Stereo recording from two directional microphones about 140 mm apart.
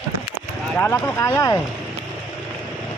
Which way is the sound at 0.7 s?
15° left (ahead or behind).